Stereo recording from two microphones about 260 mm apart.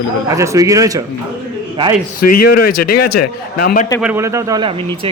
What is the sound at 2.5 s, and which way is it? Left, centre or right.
Speech, left.